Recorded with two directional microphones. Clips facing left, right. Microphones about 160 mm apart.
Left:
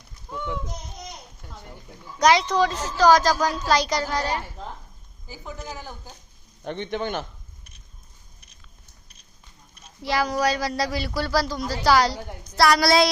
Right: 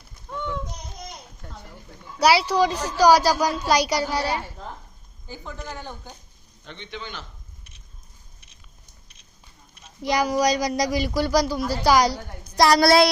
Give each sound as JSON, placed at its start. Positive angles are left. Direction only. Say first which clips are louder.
{"t": 0.3, "sound": "a sound", "louder": "right 1 dB", "side_deg": 10}
{"t": 2.1, "sound": "a woman's voice", "louder": "even", "side_deg": -10}
{"t": 5.3, "sound": "speech", "louder": "right 1 dB", "side_deg": 5}
{"t": 6.7, "sound": "a man's voice", "louder": "left 9 dB", "side_deg": 50}
{"t": 10.0, "sound": "a woman's voice", "louder": "right 2 dB", "side_deg": -15}
{"t": 12.8, "sound": "a sound", "louder": "right 3 dB", "side_deg": -60}